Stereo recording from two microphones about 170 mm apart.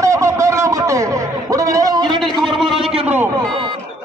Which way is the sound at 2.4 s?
Centre (ahead or behind).